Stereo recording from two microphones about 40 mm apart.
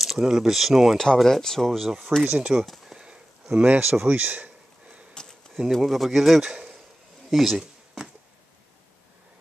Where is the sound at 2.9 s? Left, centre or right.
Right.